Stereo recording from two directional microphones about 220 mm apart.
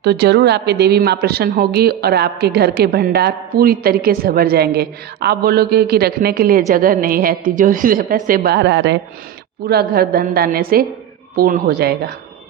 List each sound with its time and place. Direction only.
0.0 s a woman's voice: 50° right (ahead or behind)